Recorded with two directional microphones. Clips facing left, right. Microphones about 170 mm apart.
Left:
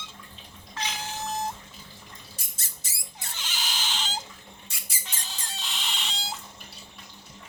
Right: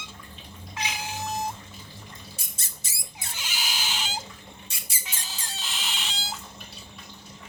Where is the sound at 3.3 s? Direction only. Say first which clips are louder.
Right 1 dB; 10° right (ahead or behind).